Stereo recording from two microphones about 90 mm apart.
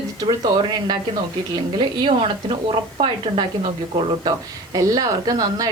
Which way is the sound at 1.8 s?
60° right (ahead or behind).